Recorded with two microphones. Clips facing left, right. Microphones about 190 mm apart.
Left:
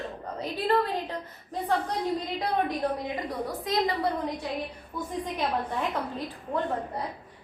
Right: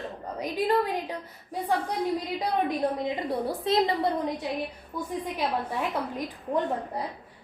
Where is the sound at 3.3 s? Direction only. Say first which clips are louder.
Right 4 dB; 30° right (ahead or behind).